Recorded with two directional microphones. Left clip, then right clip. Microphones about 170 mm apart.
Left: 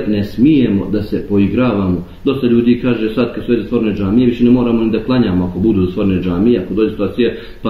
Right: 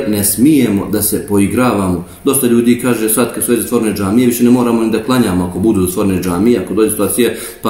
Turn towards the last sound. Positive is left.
turn(degrees=-15)  # may be behind; listen again after turning